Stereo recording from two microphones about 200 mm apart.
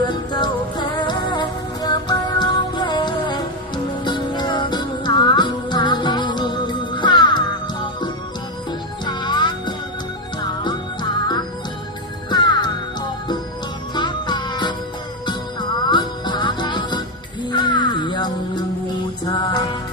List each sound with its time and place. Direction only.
0.3 s music: 20° left (ahead or behind)
9.0 s music: 20° left (ahead or behind)
15.9 s music: 20° left (ahead or behind)